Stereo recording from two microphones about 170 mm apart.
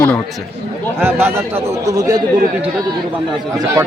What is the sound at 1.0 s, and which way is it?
Speech, 15° right (ahead or behind).